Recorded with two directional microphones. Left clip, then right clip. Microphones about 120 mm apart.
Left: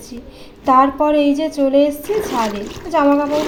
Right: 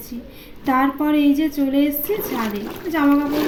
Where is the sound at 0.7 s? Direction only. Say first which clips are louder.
Left 6 dB; 25° left (ahead or behind).